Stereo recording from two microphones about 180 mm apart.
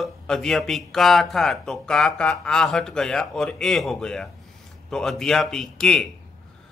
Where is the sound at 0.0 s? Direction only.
5° left (ahead or behind).